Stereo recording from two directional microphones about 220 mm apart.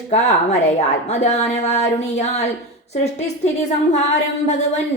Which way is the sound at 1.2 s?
30° left (ahead or behind).